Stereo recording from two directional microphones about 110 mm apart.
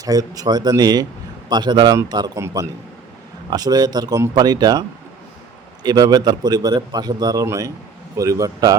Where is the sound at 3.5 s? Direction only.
35° right (ahead or behind).